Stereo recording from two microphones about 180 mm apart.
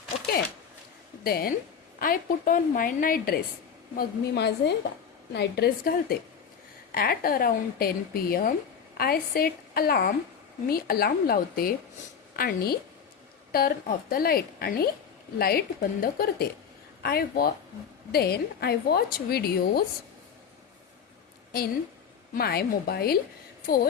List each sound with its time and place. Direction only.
1.2 s a woman's voice: 55° left (ahead or behind)
22.4 s a woman's voice: 60° left (ahead or behind)